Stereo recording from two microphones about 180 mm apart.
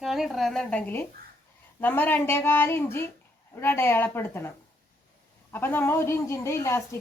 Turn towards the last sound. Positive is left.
turn(degrees=15)  # may be behind; listen again after turning